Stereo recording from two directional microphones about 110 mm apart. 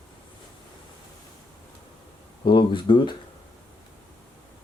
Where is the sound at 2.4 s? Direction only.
45° left (ahead or behind).